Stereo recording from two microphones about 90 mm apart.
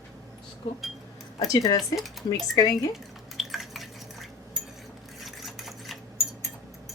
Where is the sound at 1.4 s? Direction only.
40° left (ahead or behind).